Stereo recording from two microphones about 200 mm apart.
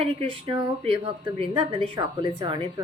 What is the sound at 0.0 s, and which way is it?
A woman's voice, 30° right (ahead or behind).